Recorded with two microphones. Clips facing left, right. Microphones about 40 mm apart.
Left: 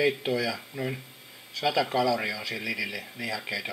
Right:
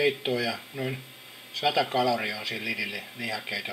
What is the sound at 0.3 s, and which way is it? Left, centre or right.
Speech, centre.